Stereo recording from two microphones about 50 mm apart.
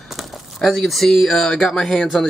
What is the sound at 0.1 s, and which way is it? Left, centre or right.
Speech, centre.